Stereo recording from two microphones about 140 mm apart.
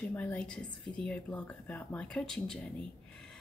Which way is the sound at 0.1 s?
10° left (ahead or behind).